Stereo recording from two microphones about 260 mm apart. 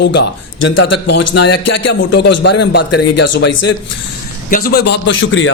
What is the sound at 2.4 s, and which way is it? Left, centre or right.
A man's voice, left.